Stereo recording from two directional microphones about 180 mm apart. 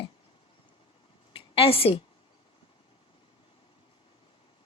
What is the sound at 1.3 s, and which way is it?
Speech, 30° left (ahead or behind).